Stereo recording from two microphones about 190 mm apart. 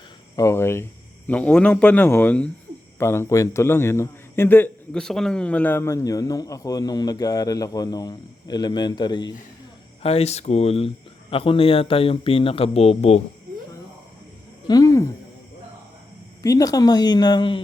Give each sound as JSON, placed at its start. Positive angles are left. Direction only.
{"t": 0.3, "sound": "a man's voice", "side_deg": 15}
{"t": 14.7, "sound": "a man's voice", "side_deg": 20}
{"t": 16.4, "sound": "speech", "side_deg": 20}